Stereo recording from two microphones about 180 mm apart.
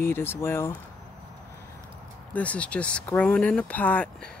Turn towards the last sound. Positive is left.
turn(degrees=5)  # may be behind; listen again after turning